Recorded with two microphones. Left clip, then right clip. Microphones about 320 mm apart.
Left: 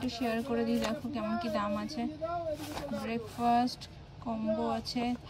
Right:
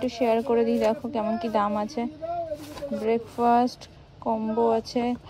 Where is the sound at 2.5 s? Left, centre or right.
Centre.